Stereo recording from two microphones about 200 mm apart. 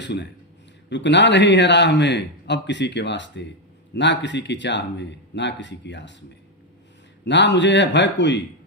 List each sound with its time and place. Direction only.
0.0 s a man's voice: 60° left (ahead or behind)
7.3 s a man's voice: 60° left (ahead or behind)